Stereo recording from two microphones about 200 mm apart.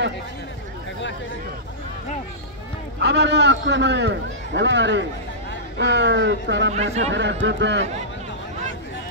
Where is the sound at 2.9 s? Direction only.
60° right (ahead or behind).